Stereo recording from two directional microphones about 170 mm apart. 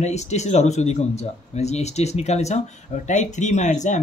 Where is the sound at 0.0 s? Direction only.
40° left (ahead or behind).